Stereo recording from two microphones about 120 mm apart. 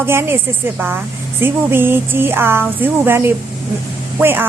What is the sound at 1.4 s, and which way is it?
A woman's voice, 20° right (ahead or behind).